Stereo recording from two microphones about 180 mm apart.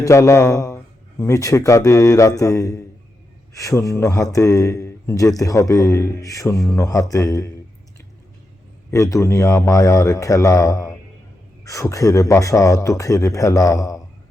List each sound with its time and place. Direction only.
0.0 s a man's voice: 15° left (ahead or behind)
8.9 s a man's voice: 15° left (ahead or behind)